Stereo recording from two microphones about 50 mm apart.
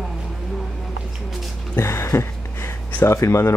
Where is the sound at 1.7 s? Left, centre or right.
Left.